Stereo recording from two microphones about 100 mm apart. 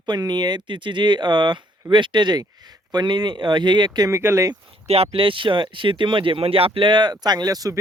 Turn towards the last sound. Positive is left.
turn(degrees=-35)  # may be behind; listen again after turning